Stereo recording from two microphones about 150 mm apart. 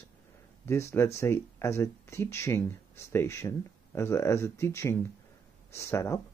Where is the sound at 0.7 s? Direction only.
20° left (ahead or behind).